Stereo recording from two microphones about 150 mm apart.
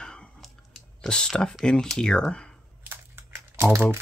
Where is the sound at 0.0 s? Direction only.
5° left (ahead or behind).